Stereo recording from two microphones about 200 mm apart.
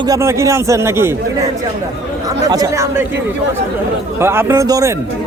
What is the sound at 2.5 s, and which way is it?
Speech, 15° right (ahead or behind).